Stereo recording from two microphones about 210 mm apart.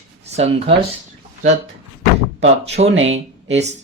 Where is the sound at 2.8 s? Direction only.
65° right (ahead or behind).